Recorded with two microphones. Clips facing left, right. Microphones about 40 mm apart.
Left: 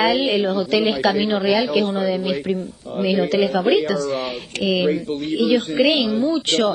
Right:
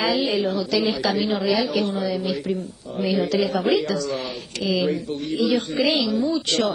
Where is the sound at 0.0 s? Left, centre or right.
Left.